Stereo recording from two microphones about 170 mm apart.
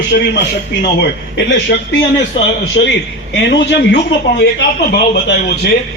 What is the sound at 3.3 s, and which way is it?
Speech, 90° left.